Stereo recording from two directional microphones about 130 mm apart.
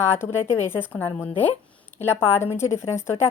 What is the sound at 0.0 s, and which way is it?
A woman's voice, 20° left (ahead or behind).